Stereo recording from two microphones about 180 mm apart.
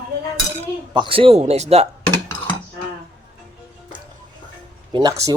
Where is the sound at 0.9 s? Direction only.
30° right (ahead or behind).